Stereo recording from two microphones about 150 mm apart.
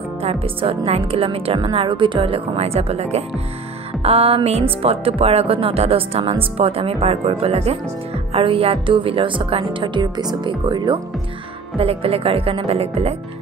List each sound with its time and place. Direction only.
0.2 s speech: 40° right (ahead or behind)